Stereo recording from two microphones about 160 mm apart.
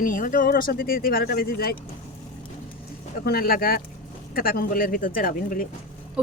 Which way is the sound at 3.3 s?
70° left (ahead or behind).